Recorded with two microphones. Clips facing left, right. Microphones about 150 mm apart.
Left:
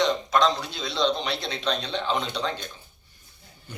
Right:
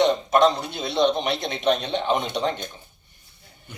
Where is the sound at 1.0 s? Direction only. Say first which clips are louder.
Right 3 dB; 20° right (ahead or behind).